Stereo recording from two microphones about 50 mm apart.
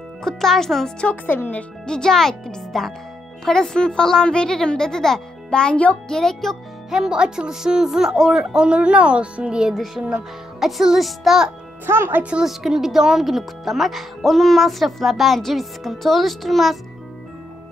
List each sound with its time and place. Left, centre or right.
0.2 s a woman's voice: centre
1.0 s speech: left
1.9 s a woman's voice: centre
6.0 s a woman's voice: centre
6.9 s a woman's voice: centre
10.6 s a woman's voice: centre
11.8 s speech: right
12.2 s a woman's voice: right
12.4 s speech: centre